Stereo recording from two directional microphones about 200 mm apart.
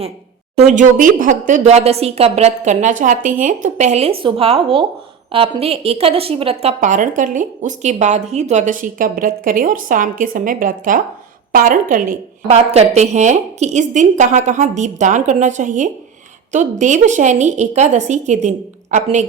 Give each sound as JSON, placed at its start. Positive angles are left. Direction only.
{"t": 0.5, "sound": "a woman's voice", "side_deg": -35}